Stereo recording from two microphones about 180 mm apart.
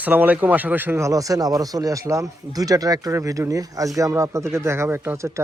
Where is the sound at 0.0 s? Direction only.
10° right (ahead or behind).